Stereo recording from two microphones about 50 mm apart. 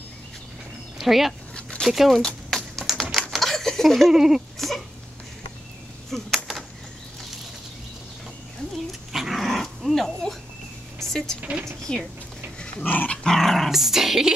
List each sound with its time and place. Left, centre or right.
0.9 s speech: centre
1.5 s a sound: left
1.9 s speech: centre
2.2 s a sound: centre
4.1 s speech: centre
6.0 s a sound: centre
9.1 s speech: centre
11.9 s speech: centre
12.8 s dog: left
13.2 s dog: centre
13.7 s speech: centre